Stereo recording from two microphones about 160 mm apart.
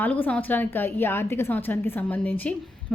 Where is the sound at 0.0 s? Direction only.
10° left (ahead or behind).